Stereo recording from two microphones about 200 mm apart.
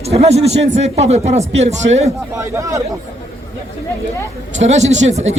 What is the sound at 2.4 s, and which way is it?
Speech, 15° right (ahead or behind).